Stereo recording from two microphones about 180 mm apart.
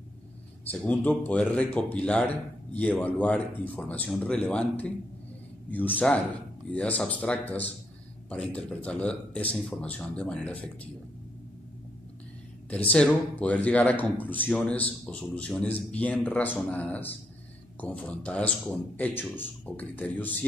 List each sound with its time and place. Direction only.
0.7 s speech: 10° left (ahead or behind)
12.6 s speech: 10° left (ahead or behind)